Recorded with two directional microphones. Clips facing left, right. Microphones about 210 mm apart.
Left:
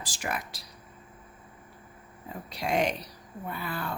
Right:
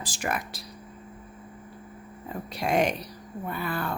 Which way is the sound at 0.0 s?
50° right (ahead or behind).